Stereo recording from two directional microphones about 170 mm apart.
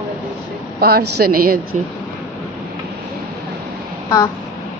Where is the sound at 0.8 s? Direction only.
65° right (ahead or behind).